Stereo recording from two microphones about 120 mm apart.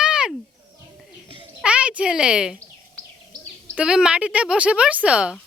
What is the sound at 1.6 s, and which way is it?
Speech, 10° right (ahead or behind).